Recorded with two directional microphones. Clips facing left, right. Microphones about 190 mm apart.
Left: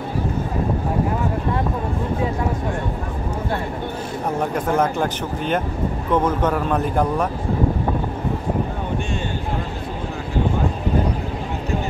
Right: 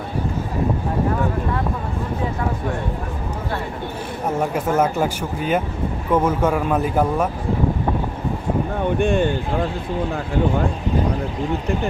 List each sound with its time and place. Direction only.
4.4 s speech: 5° right (ahead or behind)
9.0 s speech: 55° right (ahead or behind)